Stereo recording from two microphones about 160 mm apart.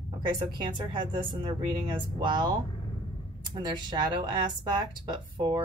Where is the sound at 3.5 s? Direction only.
30° right (ahead or behind).